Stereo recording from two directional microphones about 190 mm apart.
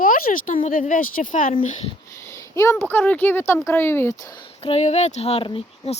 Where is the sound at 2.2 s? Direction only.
15° left (ahead or behind).